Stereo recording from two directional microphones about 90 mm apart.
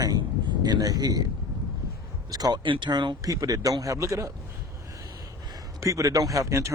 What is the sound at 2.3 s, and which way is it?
Speech, 45° right (ahead or behind).